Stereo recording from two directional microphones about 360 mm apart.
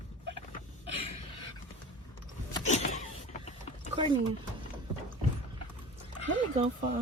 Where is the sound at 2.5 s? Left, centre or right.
Centre.